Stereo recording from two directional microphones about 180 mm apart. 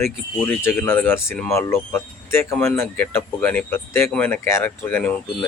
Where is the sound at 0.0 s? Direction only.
10° left (ahead or behind).